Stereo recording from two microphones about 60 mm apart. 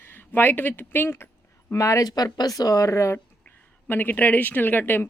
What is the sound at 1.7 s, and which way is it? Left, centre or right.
Speech, left.